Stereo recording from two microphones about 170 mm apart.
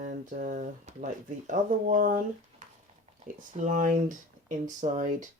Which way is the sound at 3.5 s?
50° right (ahead or behind).